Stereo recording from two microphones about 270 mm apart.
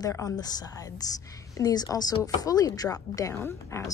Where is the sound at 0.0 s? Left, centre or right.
Centre.